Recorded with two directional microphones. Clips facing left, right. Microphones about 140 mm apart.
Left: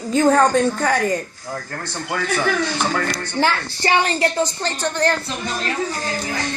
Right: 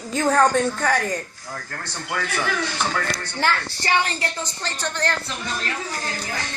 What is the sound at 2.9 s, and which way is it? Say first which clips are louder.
Speech: left 5 dB; 10° left (ahead or behind).